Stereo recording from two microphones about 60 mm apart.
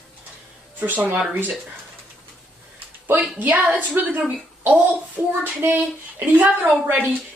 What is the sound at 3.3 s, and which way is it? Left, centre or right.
A woman's voice, right.